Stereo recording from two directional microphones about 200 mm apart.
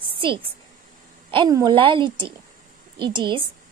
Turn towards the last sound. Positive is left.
turn(degrees=-25)  # may be behind; listen again after turning